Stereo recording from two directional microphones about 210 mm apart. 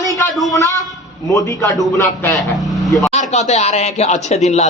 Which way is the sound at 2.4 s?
Centre (ahead or behind).